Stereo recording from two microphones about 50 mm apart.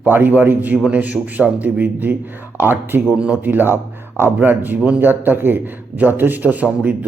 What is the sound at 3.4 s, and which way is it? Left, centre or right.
A man's voice, right.